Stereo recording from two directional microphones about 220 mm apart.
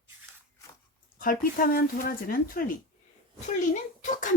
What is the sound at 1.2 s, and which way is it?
Speech, 40° left (ahead or behind).